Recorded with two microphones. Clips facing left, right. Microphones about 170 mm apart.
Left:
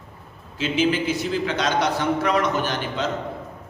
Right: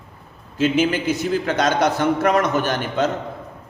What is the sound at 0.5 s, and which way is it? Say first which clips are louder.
A man's voice: right 3 dB; 45° right (ahead or behind).